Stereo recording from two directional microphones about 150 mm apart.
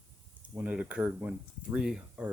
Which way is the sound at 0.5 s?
10° right (ahead or behind).